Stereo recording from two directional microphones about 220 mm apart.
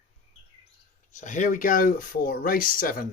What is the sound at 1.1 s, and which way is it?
Speech, 35° left (ahead or behind).